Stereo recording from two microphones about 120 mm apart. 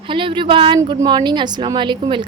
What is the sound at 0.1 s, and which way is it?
A woman's voice, 45° right (ahead or behind).